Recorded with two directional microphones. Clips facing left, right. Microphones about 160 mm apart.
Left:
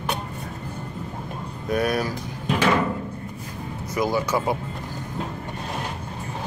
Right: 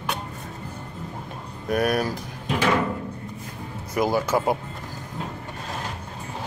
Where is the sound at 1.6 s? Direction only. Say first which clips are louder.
Right 1 dB; 50° right (ahead or behind).